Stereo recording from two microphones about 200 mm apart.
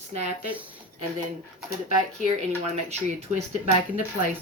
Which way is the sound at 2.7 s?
35° right (ahead or behind).